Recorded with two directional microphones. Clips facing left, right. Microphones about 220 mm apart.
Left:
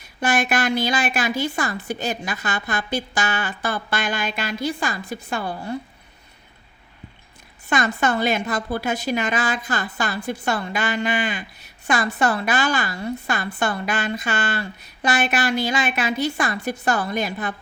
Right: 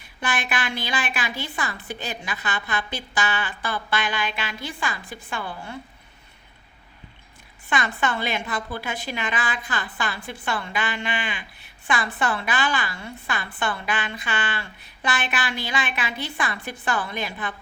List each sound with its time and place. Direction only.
0.0 s a woman's voice: 45° left (ahead or behind)
7.7 s a woman's voice: 40° left (ahead or behind)